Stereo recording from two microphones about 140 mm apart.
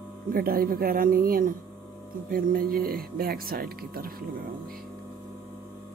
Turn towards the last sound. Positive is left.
turn(degrees=-90)